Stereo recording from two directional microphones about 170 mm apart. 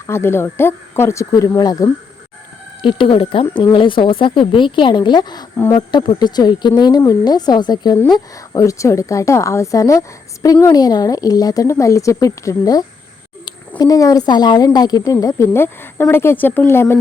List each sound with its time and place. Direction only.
0.1 s speech: 15° left (ahead or behind)
2.8 s speech: 30° left (ahead or behind); by 17.0 s 15° left (ahead or behind)